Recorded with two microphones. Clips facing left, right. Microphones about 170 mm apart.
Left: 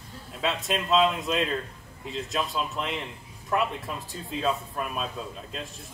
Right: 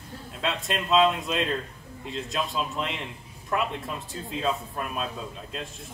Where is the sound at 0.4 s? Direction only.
Centre (ahead or behind).